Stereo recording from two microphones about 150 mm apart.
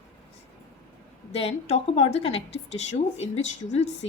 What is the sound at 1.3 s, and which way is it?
A woman's voice, 45° left (ahead or behind).